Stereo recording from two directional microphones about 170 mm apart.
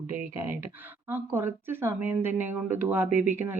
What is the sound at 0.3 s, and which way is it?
Speech, 15° right (ahead or behind).